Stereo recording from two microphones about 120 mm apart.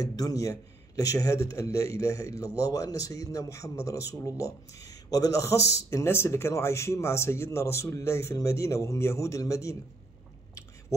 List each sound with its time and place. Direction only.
0.0 s speech: 30° left (ahead or behind)